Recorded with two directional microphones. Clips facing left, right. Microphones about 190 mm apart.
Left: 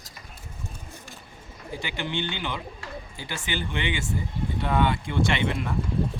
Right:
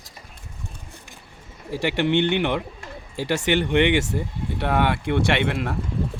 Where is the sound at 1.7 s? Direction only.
70° right (ahead or behind).